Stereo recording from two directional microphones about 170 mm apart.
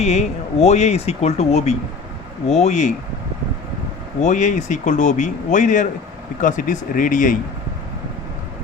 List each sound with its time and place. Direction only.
0.0 s speech: 40° left (ahead or behind)
4.2 s speech: 45° left (ahead or behind)